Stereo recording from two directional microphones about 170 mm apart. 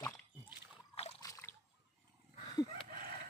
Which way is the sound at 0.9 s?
35° left (ahead or behind).